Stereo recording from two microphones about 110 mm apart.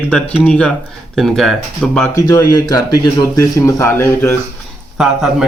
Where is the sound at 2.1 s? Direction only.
35° left (ahead or behind).